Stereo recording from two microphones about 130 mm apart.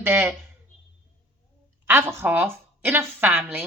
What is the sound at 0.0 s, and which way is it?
Speech, 15° right (ahead or behind).